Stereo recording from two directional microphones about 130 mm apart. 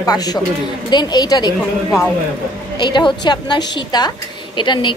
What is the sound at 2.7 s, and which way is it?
A woman's voice, 35° left (ahead or behind).